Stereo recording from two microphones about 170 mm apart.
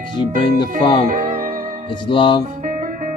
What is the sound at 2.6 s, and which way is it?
Music, 50° right (ahead or behind).